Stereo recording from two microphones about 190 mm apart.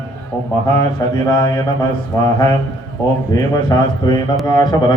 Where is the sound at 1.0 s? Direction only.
20° left (ahead or behind).